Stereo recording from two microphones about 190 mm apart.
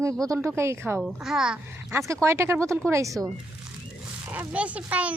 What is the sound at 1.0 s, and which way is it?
Speech, 5° right (ahead or behind).